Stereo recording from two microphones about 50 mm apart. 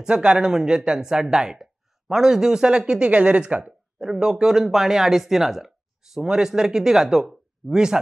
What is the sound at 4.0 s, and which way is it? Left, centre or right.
Speech, centre.